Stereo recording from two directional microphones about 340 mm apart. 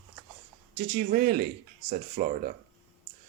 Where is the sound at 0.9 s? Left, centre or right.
Right.